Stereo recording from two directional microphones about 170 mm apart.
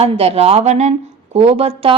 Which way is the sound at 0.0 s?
35° right (ahead or behind).